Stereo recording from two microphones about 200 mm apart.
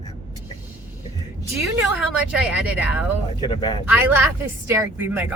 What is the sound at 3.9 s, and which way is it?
Speech, 10° right (ahead or behind).